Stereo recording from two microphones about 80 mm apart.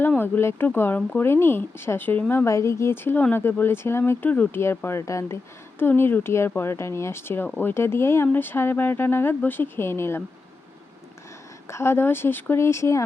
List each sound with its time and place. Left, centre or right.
0.2 s speech: left
2.3 s speech: left
5.8 s speech: left
11.7 s speech: left